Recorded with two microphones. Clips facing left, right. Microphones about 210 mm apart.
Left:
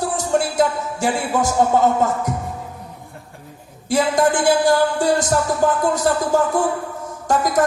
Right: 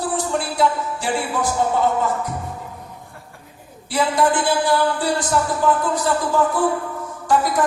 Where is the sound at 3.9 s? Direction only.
45° left (ahead or behind).